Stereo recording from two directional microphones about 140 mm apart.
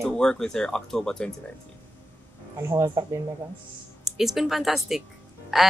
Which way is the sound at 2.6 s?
20° right (ahead or behind).